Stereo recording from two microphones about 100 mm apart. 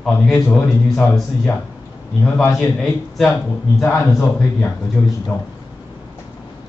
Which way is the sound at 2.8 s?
10° left (ahead or behind).